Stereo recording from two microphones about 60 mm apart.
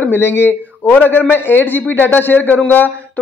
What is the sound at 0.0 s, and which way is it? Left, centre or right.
A man's voice, left.